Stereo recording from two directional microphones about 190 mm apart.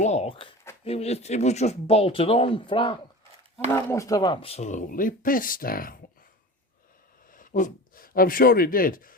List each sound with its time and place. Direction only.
0.0 s speech: 35° left (ahead or behind)
3.7 s speech: 15° left (ahead or behind); by 6.0 s 50° left (ahead or behind)
7.3 s speech: 45° left (ahead or behind)